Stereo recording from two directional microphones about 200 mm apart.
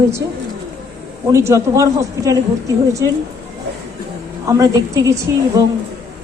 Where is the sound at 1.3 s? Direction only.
15° right (ahead or behind).